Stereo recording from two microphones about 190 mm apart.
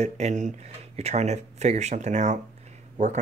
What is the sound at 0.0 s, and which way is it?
Speech, 40° right (ahead or behind).